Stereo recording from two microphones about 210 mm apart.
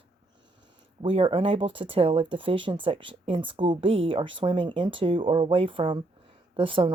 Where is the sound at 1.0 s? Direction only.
25° right (ahead or behind).